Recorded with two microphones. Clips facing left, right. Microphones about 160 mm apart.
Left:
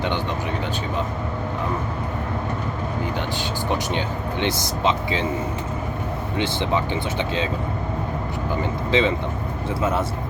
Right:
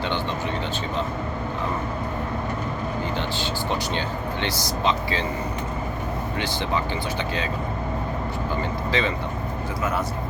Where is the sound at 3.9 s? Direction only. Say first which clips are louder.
Left 2 dB; 20° left (ahead or behind).